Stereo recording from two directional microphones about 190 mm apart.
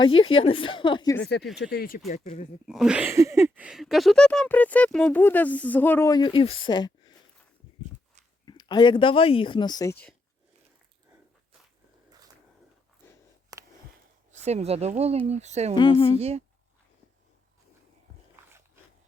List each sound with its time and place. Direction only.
0.4 s speech: 25° left (ahead or behind)
1.2 s speech: 60° left (ahead or behind)
2.0 s speech: 40° left (ahead or behind)
2.6 s speech: 5° right (ahead or behind); by 7.1 s 20° left (ahead or behind)
8.4 s speech: 20° left (ahead or behind)
14.4 s speech: 35° right (ahead or behind)
15.8 s speech: 25° left (ahead or behind)
16.1 s speech: 35° right (ahead or behind)